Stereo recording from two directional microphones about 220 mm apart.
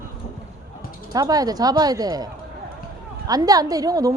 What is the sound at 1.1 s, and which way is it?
A woman's voice, 15° right (ahead or behind).